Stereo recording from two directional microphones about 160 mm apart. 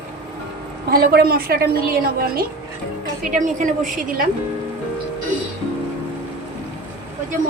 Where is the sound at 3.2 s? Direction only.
55° right (ahead or behind).